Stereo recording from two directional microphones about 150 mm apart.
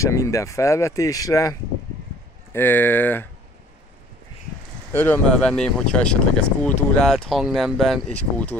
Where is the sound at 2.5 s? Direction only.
15° left (ahead or behind).